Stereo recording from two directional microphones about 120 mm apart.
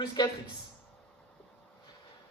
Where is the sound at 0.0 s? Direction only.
35° left (ahead or behind).